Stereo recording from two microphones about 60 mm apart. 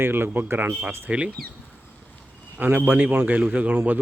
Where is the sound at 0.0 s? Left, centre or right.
Right.